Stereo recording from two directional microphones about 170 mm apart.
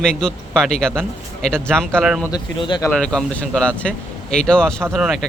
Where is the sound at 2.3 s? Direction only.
25° left (ahead or behind).